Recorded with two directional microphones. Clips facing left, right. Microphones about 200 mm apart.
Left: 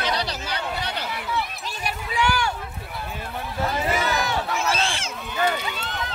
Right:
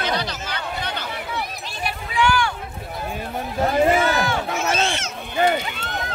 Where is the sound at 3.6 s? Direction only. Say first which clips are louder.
Right 7 dB; 50° right (ahead or behind).